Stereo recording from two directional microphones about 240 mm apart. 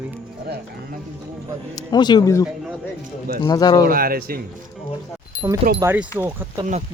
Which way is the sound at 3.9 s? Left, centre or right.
Right.